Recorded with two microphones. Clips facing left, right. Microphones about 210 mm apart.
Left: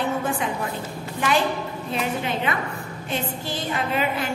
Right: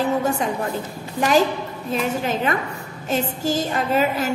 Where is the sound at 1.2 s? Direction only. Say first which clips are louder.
Right 5 dB; 40° right (ahead or behind).